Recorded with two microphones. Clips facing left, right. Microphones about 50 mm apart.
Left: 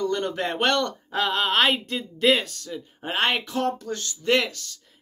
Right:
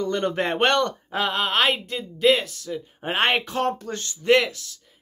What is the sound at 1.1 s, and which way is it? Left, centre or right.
Speech, centre.